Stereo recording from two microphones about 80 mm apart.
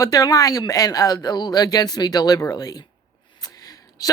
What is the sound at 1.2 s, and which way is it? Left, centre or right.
Speech, left.